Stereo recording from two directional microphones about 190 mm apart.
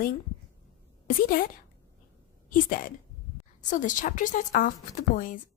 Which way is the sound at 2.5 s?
45° left (ahead or behind).